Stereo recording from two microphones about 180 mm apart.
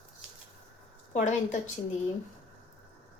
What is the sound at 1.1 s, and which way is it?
Speech, 40° left (ahead or behind).